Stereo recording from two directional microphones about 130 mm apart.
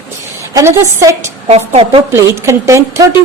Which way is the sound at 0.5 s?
20° right (ahead or behind).